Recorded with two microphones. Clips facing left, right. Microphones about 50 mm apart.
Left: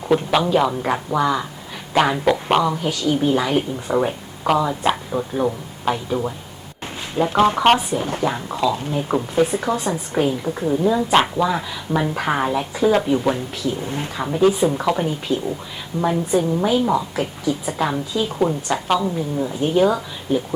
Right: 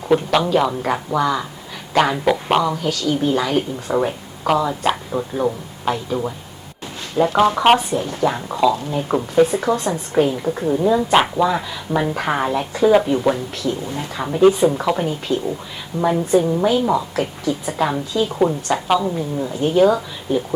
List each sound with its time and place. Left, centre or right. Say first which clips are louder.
0.3 s a woman's voice: even; centre
2.8 s speech: even; centre
7.2 s speech: right 3 dB; centre
7.6 s a woman's voice: right 1 dB; centre